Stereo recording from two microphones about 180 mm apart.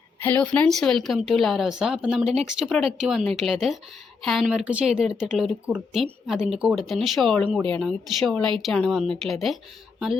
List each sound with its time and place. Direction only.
0.2 s speech: 10° left (ahead or behind)